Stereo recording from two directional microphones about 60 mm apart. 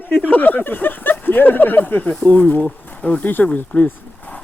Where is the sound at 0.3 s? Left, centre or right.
Left.